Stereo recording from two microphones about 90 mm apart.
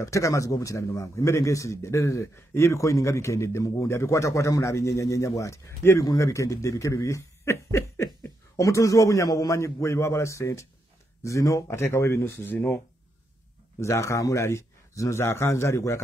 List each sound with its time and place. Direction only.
0.0 s a man's voice: 35° left (ahead or behind)
13.7 s a man's voice: 35° left (ahead or behind)